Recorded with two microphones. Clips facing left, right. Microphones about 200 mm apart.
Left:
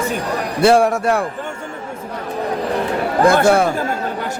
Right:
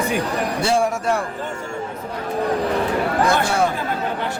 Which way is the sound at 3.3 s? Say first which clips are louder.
Left 7 dB; 50° left (ahead or behind).